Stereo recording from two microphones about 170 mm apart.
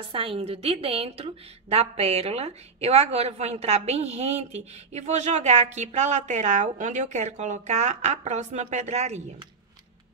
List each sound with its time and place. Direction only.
0.1 s a woman's voice: 35° right (ahead or behind)